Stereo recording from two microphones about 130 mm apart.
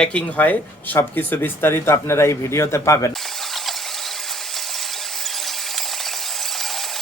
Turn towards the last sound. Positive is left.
turn(degrees=0)  # may be behind; listen again after turning